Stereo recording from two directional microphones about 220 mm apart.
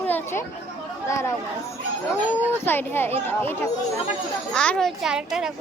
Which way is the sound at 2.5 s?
10° left (ahead or behind).